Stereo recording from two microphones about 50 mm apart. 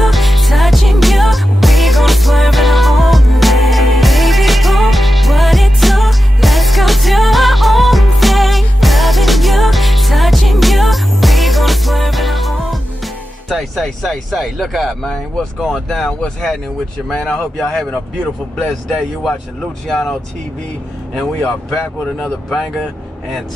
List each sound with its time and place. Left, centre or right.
0.0 s music: centre
15.0 s speech: centre
21.1 s speech: centre